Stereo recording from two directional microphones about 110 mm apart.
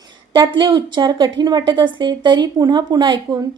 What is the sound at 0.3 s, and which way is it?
A woman's voice, 50° right (ahead or behind).